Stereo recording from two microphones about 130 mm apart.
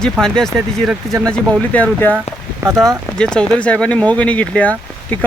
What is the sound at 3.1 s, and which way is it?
Speech, 5° left (ahead or behind).